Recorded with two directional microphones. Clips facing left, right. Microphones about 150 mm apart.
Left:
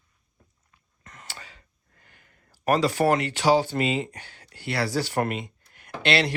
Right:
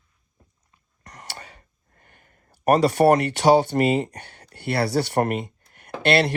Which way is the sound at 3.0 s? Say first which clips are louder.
Right 5 dB; 55° right (ahead or behind).